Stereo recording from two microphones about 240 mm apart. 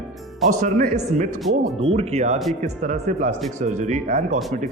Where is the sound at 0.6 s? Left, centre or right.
Right.